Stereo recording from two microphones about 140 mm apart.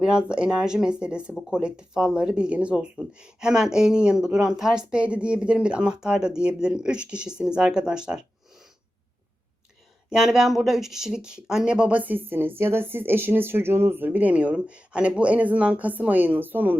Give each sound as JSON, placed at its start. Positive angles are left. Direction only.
{"t": 0.0, "sound": "speech", "side_deg": -5}
{"t": 10.1, "sound": "speech", "side_deg": -5}